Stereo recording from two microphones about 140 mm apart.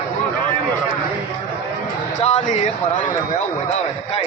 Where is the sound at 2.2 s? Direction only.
55° left (ahead or behind).